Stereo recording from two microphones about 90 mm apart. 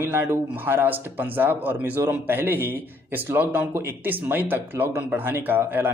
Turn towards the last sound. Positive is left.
turn(degrees=-25)  # may be behind; listen again after turning